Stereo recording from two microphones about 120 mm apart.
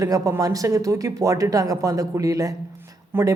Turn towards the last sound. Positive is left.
turn(degrees=-20)  # may be behind; listen again after turning